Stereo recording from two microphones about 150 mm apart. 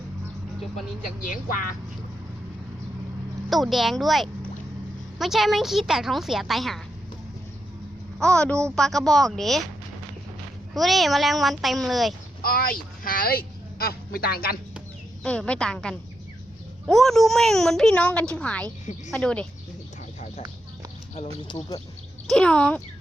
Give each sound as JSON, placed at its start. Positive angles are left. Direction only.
{"t": 1.2, "sound": "speech", "side_deg": 65}
{"t": 3.5, "sound": "a woman's voice", "side_deg": 0}
{"t": 8.2, "sound": "a woman's voice", "side_deg": 5}
{"t": 10.8, "sound": "a woman's voice", "side_deg": 0}
{"t": 12.4, "sound": "speech", "side_deg": 75}
{"t": 15.2, "sound": "a woman's voice", "side_deg": 5}
{"t": 21.2, "sound": "speech", "side_deg": 30}
{"t": 22.3, "sound": "a woman's voice", "side_deg": 5}